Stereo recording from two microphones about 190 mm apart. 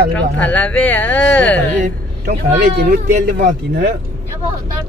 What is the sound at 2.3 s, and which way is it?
Speech, 55° right (ahead or behind).